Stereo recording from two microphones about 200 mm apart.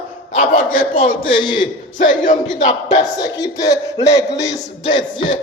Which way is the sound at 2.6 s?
35° left (ahead or behind).